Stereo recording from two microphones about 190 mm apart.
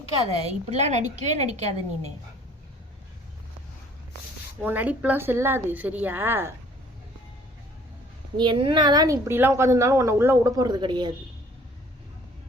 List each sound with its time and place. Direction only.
0.3 s a woman's voice: 35° right (ahead or behind)
4.6 s a woman's voice: 10° right (ahead or behind)
8.4 s a woman's voice: 25° right (ahead or behind)